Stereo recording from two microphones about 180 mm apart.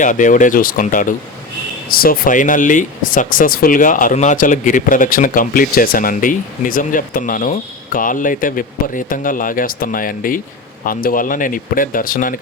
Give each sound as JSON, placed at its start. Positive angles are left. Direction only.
{"t": 0.0, "sound": "speech", "side_deg": 45}